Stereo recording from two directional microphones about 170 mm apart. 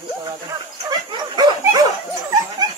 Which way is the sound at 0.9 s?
25° right (ahead or behind).